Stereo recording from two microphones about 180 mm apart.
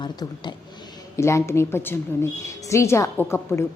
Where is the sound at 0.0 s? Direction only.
25° left (ahead or behind).